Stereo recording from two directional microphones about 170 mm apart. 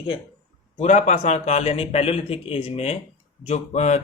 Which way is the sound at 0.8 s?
45° left (ahead or behind).